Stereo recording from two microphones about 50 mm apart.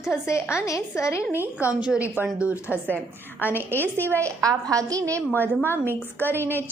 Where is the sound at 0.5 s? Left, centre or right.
Left.